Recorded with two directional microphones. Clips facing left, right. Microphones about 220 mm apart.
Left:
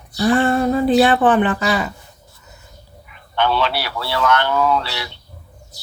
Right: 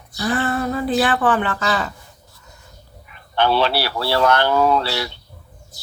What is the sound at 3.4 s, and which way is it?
Speech, 35° right (ahead or behind).